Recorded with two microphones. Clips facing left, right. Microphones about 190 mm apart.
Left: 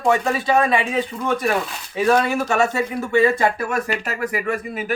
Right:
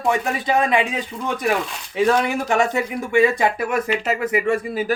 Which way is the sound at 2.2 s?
15° right (ahead or behind).